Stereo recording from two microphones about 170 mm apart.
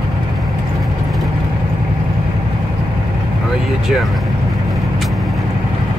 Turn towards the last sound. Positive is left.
turn(degrees=0)  # may be behind; listen again after turning